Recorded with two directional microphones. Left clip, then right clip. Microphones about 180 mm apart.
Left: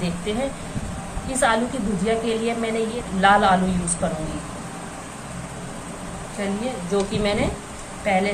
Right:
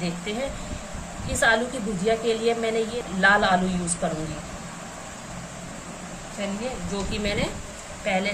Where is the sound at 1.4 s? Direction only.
25° right (ahead or behind).